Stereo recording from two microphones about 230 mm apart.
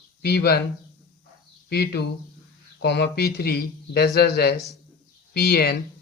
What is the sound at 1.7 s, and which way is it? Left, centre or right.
A man's voice, left.